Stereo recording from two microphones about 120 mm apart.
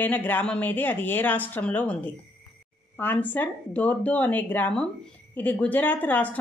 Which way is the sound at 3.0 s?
15° left (ahead or behind).